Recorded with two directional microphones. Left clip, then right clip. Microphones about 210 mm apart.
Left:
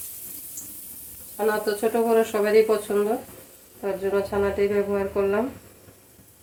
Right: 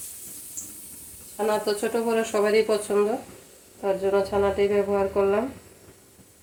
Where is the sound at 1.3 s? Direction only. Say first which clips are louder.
Left 1 dB; 10° left (ahead or behind).